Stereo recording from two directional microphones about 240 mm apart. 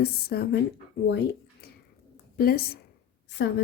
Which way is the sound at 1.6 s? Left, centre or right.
Left.